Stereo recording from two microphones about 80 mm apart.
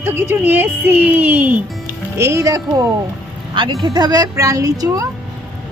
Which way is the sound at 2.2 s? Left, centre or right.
Right.